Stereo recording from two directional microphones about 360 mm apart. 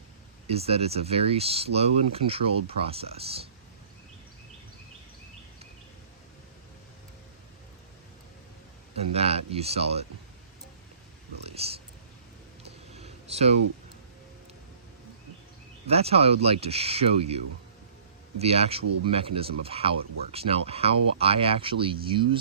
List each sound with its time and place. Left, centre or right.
0.4 s speech: centre
9.1 s speech: centre
11.4 s speech: centre
12.9 s a sound: centre
15.9 s speech: centre